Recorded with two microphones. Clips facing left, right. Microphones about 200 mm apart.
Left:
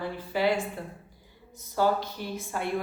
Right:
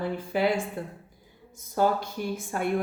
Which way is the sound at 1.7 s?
50° right (ahead or behind).